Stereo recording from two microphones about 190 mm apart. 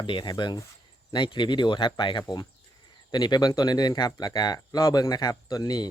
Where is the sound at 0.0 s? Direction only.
25° left (ahead or behind).